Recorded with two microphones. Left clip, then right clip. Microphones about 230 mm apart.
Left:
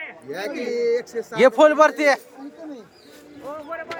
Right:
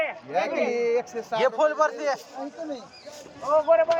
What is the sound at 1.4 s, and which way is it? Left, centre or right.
Speech, left.